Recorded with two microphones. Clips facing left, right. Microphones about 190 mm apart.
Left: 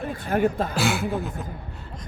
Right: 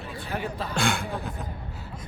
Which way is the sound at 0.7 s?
5° left (ahead or behind).